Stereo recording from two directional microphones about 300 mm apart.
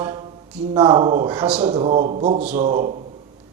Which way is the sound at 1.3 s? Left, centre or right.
Centre.